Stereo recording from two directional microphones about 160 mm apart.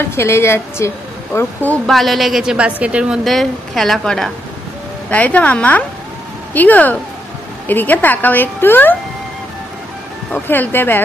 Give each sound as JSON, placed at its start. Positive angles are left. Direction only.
{"t": 0.0, "sound": "speech", "side_deg": 15}
{"t": 1.9, "sound": "a woman's voice", "side_deg": 0}
{"t": 10.3, "sound": "speech", "side_deg": 10}